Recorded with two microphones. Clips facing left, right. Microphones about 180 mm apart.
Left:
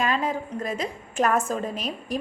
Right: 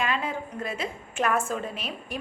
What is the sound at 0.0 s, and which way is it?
A woman's voice, 40° left (ahead or behind).